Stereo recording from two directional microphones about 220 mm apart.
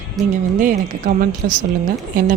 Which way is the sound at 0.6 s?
35° right (ahead or behind).